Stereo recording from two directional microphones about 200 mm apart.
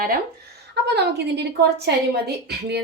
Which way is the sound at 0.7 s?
55° right (ahead or behind).